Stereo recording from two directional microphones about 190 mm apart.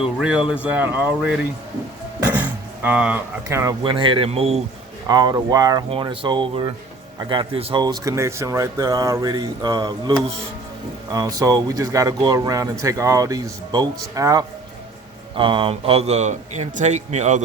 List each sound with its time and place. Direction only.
0.2 s speech: 5° right (ahead or behind); by 4.6 s 35° right (ahead or behind)
5.0 s a man's voice: 20° right (ahead or behind); by 17.4 s 40° right (ahead or behind)